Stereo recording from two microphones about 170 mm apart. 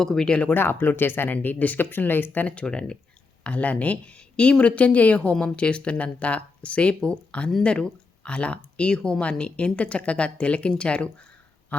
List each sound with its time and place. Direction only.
0.0 s speech: 5° left (ahead or behind)